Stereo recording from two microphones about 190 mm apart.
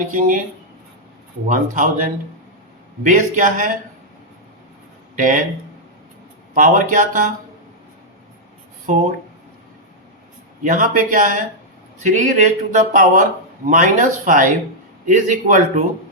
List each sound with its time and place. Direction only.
0.1 s speech: 45° right (ahead or behind)
1.5 s speech: 45° right (ahead or behind)
5.1 s speech: 45° right (ahead or behind)
6.5 s speech: 45° right (ahead or behind)
10.6 s speech: 45° right (ahead or behind)